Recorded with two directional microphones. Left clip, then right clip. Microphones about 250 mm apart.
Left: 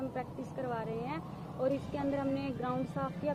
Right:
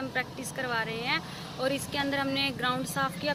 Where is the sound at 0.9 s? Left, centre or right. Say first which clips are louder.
Right 8 dB; centre.